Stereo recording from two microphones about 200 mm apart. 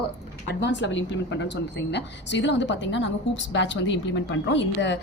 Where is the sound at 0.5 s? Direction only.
65° left (ahead or behind).